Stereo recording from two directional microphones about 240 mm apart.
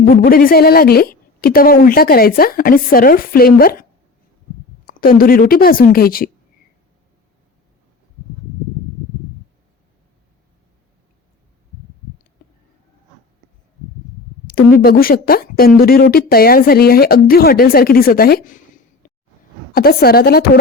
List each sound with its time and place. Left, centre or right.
0.0 s speech: left
4.9 s speech: left
14.4 s speech: left
19.0 s a sound: left
19.7 s speech: left